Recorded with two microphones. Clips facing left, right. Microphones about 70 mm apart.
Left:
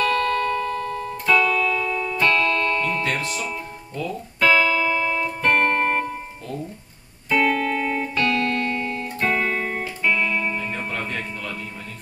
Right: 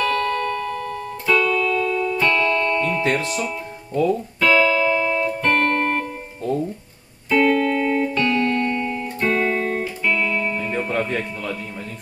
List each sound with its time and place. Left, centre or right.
0.0 s music: centre
3.0 s music: right
3.3 s speech: centre
4.4 s music: centre
7.2 s music: centre
10.9 s speech: centre